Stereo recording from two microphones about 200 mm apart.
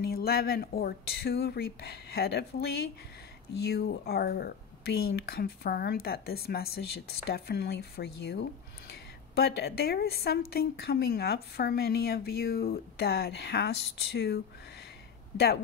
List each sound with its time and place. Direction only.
0.0 s speech: 50° left (ahead or behind)
3.6 s speech: 50° left (ahead or behind)